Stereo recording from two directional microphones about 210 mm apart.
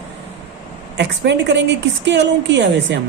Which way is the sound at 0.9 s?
55° right (ahead or behind).